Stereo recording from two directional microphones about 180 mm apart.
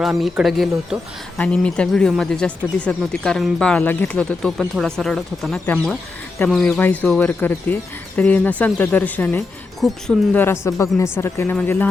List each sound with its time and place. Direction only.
0.0 s speech: centre (ahead or behind)